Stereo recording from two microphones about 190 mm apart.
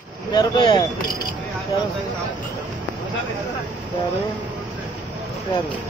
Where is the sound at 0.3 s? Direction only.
25° left (ahead or behind).